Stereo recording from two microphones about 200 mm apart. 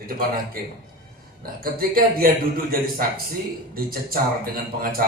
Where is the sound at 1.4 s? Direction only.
45° right (ahead or behind).